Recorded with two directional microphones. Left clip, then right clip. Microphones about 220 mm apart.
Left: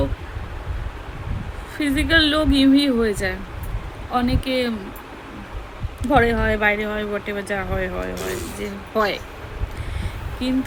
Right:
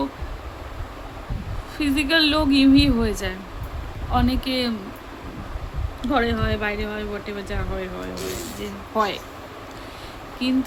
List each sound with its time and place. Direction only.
1.8 s a woman's voice: 15° right (ahead or behind)
6.0 s a woman's voice: centre (ahead or behind)
10.4 s a woman's voice: 15° right (ahead or behind)